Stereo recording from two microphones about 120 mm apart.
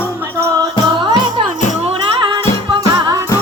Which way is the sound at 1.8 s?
45° right (ahead or behind).